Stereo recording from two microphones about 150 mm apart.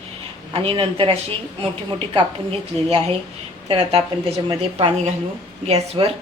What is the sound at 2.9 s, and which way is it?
A woman's voice, 45° right (ahead or behind).